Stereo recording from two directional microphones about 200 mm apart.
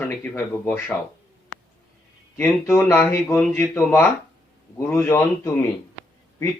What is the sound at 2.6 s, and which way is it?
A man's voice, 10° left (ahead or behind).